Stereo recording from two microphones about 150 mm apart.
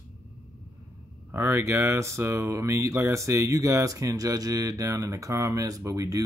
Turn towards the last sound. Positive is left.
turn(degrees=-20)  # may be behind; listen again after turning